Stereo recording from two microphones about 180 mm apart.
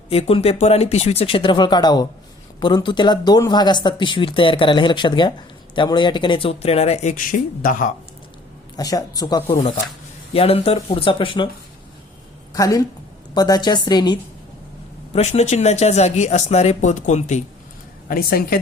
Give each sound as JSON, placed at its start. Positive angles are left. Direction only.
{"t": 0.1, "sound": "speech", "side_deg": 35}
{"t": 8.7, "sound": "speech", "side_deg": 20}
{"t": 10.3, "sound": "speech", "side_deg": 35}
{"t": 12.5, "sound": "speech", "side_deg": 20}
{"t": 15.1, "sound": "speech", "side_deg": 35}
{"t": 18.1, "sound": "a woman's voice", "side_deg": 55}